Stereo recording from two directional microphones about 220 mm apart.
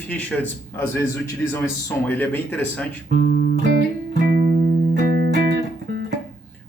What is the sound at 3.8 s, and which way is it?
Music, 40° right (ahead or behind).